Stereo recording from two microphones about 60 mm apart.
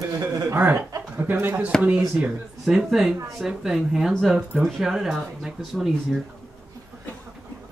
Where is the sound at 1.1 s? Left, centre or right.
Right.